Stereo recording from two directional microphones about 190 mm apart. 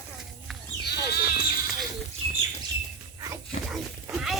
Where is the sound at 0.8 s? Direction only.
55° left (ahead or behind).